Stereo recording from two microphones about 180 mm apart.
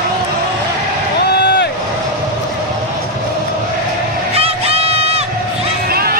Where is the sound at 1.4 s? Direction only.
70° left (ahead or behind).